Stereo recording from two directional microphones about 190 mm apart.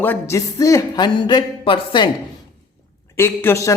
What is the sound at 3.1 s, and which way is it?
Speech, 15° left (ahead or behind).